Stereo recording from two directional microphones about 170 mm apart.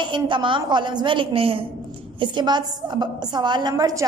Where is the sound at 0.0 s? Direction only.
30° right (ahead or behind).